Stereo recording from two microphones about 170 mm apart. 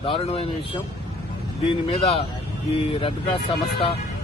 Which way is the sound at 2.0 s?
35° left (ahead or behind).